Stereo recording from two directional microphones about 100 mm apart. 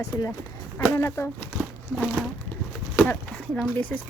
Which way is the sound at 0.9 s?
25° left (ahead or behind).